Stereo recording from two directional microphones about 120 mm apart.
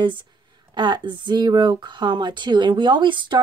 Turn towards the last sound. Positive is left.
turn(degrees=-40)  # may be behind; listen again after turning